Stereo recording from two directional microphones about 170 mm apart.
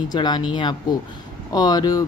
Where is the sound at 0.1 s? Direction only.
25° left (ahead or behind).